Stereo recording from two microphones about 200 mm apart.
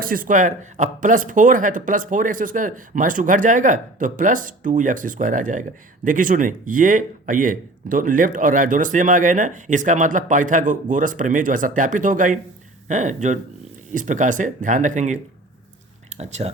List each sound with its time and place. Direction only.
0.0 s speech: 45° right (ahead or behind)